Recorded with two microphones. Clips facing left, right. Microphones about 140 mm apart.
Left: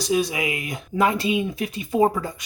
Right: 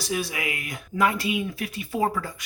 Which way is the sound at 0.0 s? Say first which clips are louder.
Left 6 dB; 20° left (ahead or behind).